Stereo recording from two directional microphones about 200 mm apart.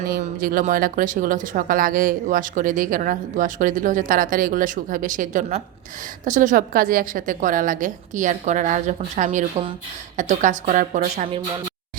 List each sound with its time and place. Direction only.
0.1 s speech: 45° right (ahead or behind)